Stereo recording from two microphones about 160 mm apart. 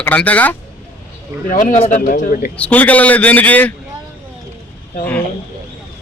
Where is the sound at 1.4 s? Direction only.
50° left (ahead or behind).